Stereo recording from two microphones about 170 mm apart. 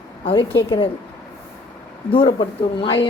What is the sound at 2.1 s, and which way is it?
Speech, 30° left (ahead or behind).